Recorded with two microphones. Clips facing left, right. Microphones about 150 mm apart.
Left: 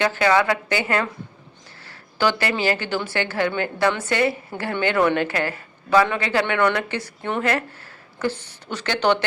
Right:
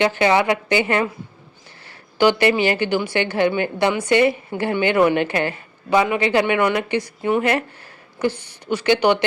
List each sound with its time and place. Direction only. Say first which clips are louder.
0.0 s a woman's voice: right 2 dB; 20° right (ahead or behind)
2.1 s a woman's voice: right 6 dB; 20° right (ahead or behind)